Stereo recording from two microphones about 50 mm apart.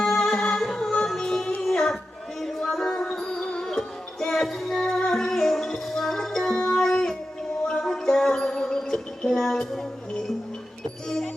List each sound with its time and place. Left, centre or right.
0.0 s music: centre
0.6 s music: centre